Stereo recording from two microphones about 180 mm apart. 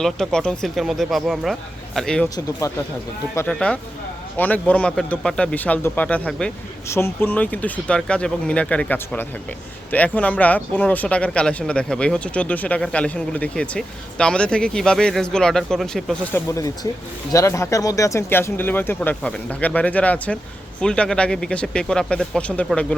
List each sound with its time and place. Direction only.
0.0 s speech: 5° left (ahead or behind)
2.3 s speech: 15° left (ahead or behind)
3.3 s speech: 5° left (ahead or behind)
16.3 s speech: 15° left (ahead or behind)